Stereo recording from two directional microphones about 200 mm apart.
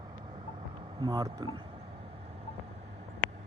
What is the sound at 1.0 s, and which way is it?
Speech, 20° right (ahead or behind).